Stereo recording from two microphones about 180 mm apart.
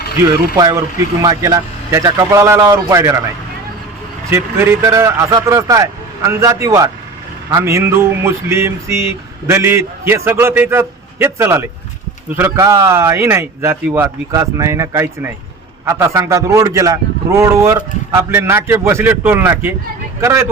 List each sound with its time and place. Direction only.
0.3 s a man's voice: 20° right (ahead or behind)
4.3 s a man's voice: 15° right (ahead or behind)